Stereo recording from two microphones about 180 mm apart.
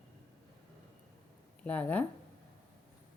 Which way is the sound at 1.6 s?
10° left (ahead or behind).